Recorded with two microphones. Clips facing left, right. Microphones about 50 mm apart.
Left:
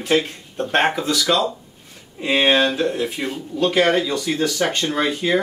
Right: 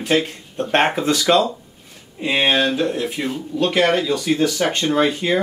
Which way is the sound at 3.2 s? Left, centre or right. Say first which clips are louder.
Right 1 dB; centre.